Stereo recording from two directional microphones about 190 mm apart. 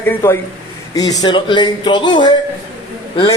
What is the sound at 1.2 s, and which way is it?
A man's voice, 25° left (ahead or behind).